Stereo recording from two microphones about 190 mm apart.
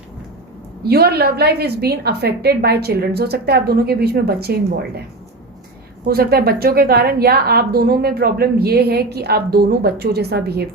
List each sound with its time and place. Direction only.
0.8 s a woman's voice: 55° right (ahead or behind)
6.1 s a woman's voice: 55° right (ahead or behind)